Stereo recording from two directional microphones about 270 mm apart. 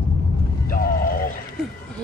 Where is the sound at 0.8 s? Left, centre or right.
Left.